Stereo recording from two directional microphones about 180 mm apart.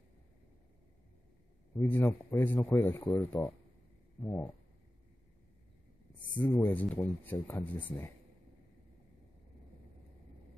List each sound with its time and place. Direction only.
1.8 s speech: 10° left (ahead or behind)
6.4 s speech: 10° left (ahead or behind)